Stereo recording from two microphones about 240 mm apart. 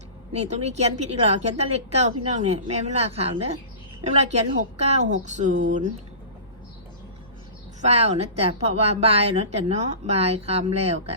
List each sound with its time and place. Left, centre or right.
0.3 s a woman's voice: right
7.8 s a woman's voice: right